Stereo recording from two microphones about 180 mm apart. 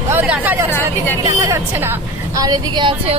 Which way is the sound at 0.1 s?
10° right (ahead or behind).